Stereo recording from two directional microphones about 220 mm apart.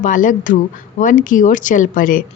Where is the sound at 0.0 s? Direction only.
35° left (ahead or behind).